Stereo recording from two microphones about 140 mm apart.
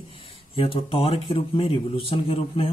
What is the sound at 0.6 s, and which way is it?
Speech, 40° left (ahead or behind).